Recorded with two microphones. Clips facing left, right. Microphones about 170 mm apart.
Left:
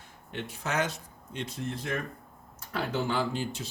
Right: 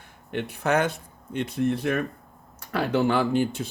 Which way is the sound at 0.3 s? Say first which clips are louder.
Right 9 dB; 60° right (ahead or behind).